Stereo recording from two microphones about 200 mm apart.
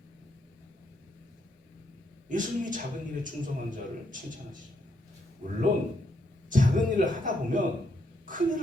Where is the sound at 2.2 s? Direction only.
40° right (ahead or behind).